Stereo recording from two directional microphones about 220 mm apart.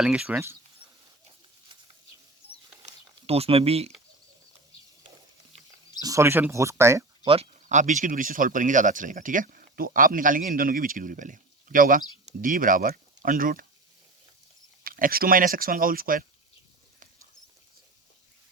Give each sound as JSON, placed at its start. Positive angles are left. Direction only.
{"t": 0.0, "sound": "speech", "side_deg": -5}
{"t": 2.8, "sound": "a sound", "side_deg": -25}
{"t": 6.0, "sound": "speech", "side_deg": -15}
{"t": 7.3, "sound": "speech", "side_deg": -30}
{"t": 14.8, "sound": "speech", "side_deg": -40}